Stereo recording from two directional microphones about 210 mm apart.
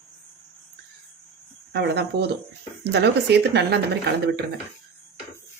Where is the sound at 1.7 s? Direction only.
50° right (ahead or behind).